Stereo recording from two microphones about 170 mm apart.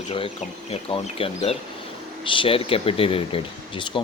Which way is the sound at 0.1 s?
35° left (ahead or behind).